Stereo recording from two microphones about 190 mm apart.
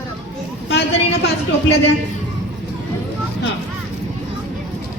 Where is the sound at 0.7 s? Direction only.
60° left (ahead or behind).